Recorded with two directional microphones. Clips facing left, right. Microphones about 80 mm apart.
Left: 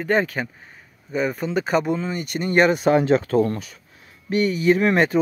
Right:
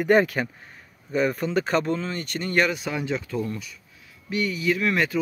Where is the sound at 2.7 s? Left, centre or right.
Left.